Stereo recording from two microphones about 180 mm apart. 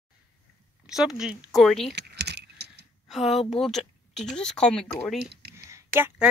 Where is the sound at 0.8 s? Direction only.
Centre (ahead or behind).